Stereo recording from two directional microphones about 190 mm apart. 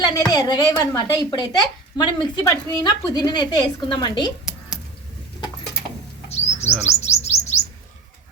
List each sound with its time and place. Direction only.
0.0 s a woman's voice: 20° left (ahead or behind)
6.2 s chirp: 35° left (ahead or behind)